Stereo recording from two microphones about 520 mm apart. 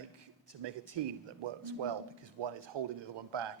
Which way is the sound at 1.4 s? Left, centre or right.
Right.